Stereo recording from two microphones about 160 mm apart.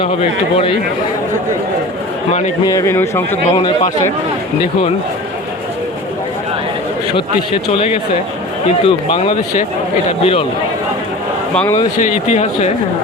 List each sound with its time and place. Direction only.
0.0 s speech: 35° left (ahead or behind)
2.6 s speech: 20° left (ahead or behind)
8.8 s speech: 35° left (ahead or behind)
11.9 s speech: 45° left (ahead or behind)